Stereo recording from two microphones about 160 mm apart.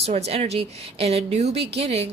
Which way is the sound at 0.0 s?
40° right (ahead or behind).